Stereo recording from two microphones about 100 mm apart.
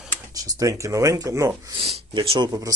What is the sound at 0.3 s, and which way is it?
Speech, 35° right (ahead or behind).